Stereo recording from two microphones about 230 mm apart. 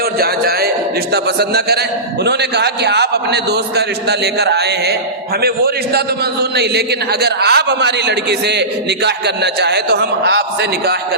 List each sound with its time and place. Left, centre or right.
0.2 s a man's voice: right